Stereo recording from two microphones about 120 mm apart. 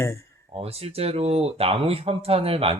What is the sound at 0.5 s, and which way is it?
Speech, 55° right (ahead or behind).